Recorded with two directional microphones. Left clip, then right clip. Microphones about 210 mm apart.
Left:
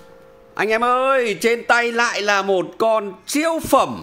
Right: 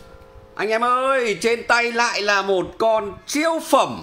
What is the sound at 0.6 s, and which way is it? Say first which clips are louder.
A man's voice: left 2 dB; 30° left (ahead or behind).